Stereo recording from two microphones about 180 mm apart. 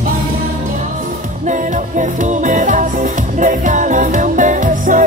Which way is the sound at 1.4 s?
45° right (ahead or behind).